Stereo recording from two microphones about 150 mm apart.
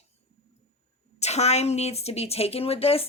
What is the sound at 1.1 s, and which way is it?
A woman's voice, 45° left (ahead or behind).